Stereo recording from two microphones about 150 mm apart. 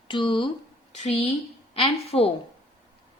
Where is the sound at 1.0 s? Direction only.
45° left (ahead or behind).